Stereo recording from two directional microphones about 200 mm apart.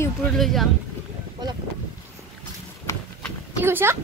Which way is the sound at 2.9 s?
15° left (ahead or behind).